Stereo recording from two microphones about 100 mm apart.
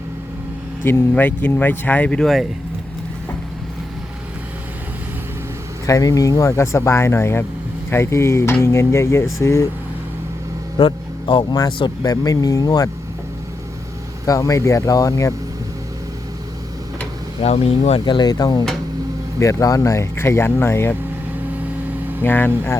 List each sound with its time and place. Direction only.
1.1 s speech: 20° left (ahead or behind); by 2.5 s centre (ahead or behind)
5.8 s speech: 35° left (ahead or behind)
10.8 s vehicle: 55° left (ahead or behind)
12.0 s speech: 40° left (ahead or behind)
14.3 s speech: 35° left (ahead or behind)
17.4 s speech: 90° left
18.0 s speech: 45° left (ahead or behind); by 20.9 s 25° left (ahead or behind)
22.2 s speech: 20° left (ahead or behind)